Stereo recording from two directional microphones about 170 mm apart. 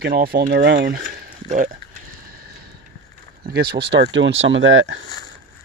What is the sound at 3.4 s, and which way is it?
Speech, 75° right (ahead or behind).